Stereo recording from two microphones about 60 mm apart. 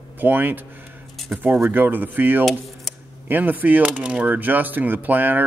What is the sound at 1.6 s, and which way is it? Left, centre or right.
Speech, right.